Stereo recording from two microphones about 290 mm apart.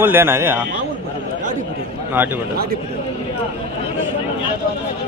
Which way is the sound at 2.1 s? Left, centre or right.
Centre.